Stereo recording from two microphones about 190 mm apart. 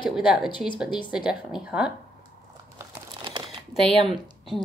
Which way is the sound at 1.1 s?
5° right (ahead or behind).